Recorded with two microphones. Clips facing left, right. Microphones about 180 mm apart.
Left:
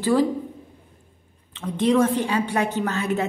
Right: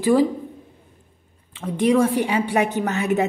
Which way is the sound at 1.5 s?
10° right (ahead or behind).